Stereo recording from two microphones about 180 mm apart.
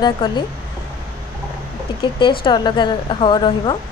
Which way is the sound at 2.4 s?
25° left (ahead or behind).